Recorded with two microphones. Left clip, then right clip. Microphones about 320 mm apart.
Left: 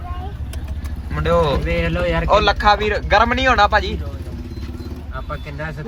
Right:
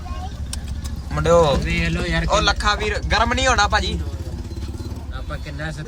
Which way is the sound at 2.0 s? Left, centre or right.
Centre.